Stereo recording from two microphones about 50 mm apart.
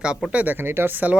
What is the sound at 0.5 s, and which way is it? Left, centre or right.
Speech, right.